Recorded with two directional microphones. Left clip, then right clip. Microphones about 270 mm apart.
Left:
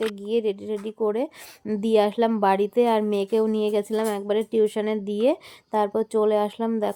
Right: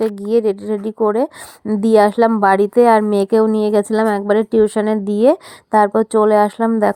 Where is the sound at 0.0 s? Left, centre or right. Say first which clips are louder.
Right 9 dB; right.